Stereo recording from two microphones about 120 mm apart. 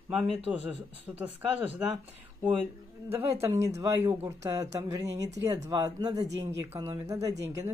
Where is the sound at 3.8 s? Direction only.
25° right (ahead or behind).